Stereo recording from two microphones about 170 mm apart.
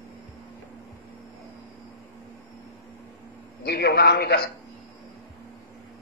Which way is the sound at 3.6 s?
70° left (ahead or behind).